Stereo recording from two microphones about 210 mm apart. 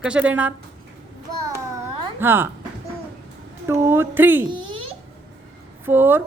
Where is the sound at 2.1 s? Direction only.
10° right (ahead or behind).